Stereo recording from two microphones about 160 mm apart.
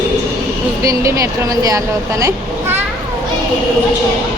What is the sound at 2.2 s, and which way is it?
Children playing, 15° right (ahead or behind).